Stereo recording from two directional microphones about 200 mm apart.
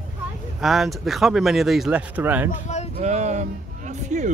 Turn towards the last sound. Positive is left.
turn(degrees=-35)  # may be behind; listen again after turning